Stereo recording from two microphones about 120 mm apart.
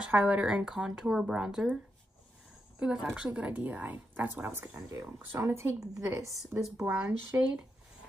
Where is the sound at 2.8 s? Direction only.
5° right (ahead or behind); by 6.3 s 20° right (ahead or behind).